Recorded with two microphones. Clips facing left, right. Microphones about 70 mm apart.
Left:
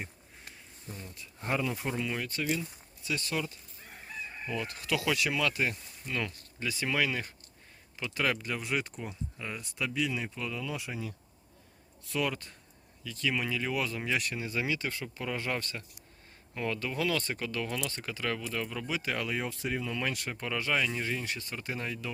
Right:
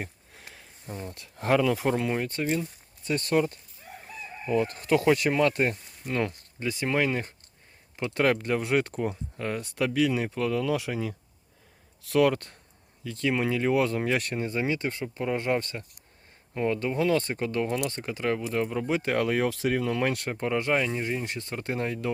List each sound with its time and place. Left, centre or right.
0.9 s speech: right
1.1 s speech: right
2.0 s speech: right
12.0 s speech: right
13.1 s speech: right
14.4 s speech: right
19.5 s speech: right
20.3 s speech: right